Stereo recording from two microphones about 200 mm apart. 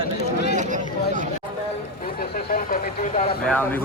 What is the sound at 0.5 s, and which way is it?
Chatter, 40° right (ahead or behind).